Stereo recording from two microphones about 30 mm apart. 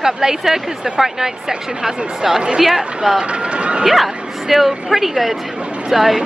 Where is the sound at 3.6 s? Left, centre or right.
Right.